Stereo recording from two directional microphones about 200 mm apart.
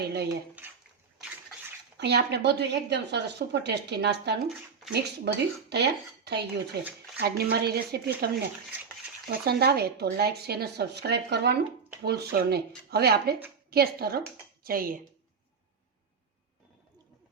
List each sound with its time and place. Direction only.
0.0 s speech: 55° right (ahead or behind)
2.0 s a woman's voice: 55° right (ahead or behind)